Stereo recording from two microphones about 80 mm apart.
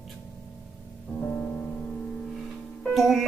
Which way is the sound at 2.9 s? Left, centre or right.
Centre.